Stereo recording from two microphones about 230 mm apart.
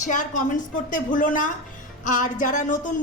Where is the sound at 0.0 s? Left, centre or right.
Left.